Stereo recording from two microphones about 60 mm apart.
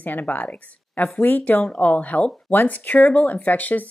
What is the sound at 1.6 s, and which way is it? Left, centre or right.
A woman's voice, left.